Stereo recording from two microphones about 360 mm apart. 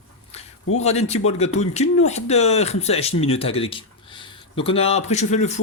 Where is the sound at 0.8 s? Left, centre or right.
Centre.